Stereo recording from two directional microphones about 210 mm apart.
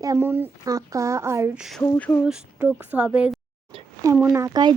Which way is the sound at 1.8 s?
5° left (ahead or behind).